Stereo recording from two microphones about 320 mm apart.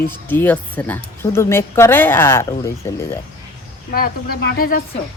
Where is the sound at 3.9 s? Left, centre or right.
Left.